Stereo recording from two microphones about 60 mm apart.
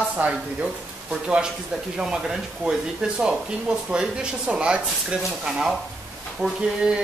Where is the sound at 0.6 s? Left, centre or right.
Centre.